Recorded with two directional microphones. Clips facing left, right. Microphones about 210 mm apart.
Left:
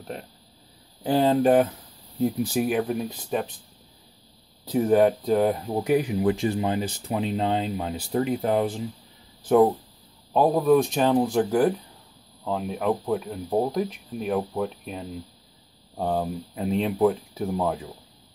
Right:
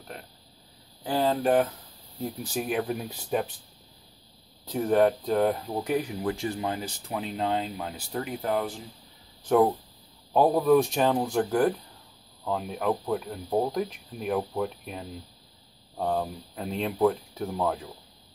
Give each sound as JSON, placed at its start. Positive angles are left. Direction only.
{"t": 1.0, "sound": "speech", "side_deg": 25}
{"t": 2.5, "sound": "speech", "side_deg": 5}
{"t": 4.7, "sound": "speech", "side_deg": 10}
{"t": 10.3, "sound": "speech", "side_deg": -5}
{"t": 16.0, "sound": "speech", "side_deg": 10}